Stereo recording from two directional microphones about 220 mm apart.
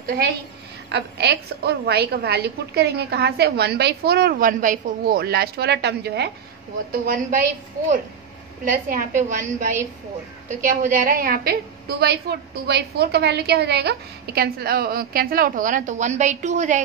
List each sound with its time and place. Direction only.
0.9 s a woman's voice: 50° right (ahead or behind)
8.6 s a woman's voice: 40° right (ahead or behind)